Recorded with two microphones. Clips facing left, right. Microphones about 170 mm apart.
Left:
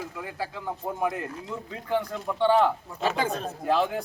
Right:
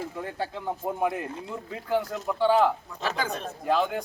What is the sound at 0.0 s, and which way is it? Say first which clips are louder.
Speech: right 2 dB; 25° right (ahead or behind).